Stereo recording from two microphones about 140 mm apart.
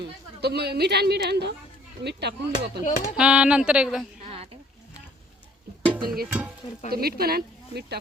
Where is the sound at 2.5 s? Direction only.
60° left (ahead or behind).